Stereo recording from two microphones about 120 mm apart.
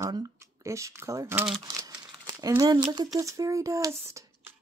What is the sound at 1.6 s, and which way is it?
Crumpling, 30° right (ahead or behind).